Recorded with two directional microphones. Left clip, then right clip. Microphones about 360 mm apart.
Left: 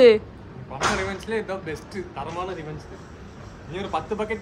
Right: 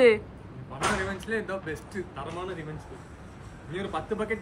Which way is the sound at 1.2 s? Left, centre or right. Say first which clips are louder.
Left 3 dB; right.